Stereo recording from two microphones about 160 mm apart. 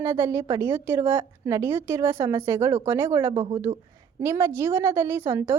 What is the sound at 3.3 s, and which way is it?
A woman's voice, 25° right (ahead or behind).